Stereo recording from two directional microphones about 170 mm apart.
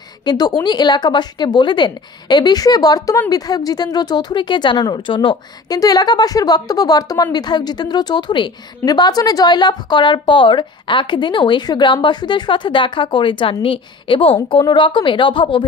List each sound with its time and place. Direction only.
0.2 s a woman's voice: 25° left (ahead or behind)